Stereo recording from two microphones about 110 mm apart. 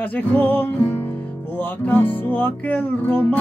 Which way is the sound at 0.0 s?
15° left (ahead or behind).